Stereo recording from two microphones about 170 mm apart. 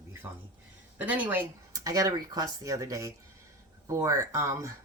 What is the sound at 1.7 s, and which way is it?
Speech, 20° right (ahead or behind).